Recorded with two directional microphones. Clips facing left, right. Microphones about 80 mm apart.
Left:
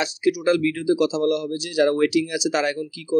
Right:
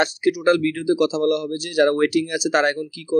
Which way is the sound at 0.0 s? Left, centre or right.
Right.